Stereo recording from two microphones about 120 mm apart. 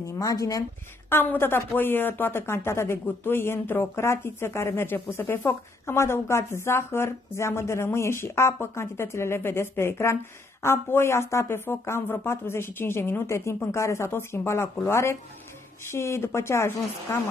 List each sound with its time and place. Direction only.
0.0 s speech: 30° left (ahead or behind)
1.1 s speech: 15° left (ahead or behind)